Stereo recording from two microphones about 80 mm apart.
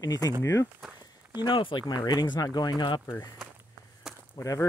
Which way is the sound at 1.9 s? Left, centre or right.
Left.